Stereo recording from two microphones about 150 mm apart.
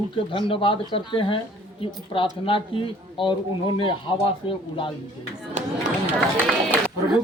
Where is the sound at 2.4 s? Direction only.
35° left (ahead or behind).